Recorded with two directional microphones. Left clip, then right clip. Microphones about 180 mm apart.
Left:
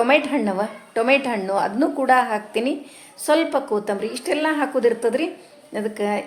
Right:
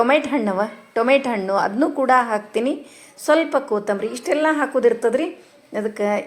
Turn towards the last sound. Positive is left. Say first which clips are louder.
# right 2 dB
turn(degrees=-15)  # may be behind; listen again after turning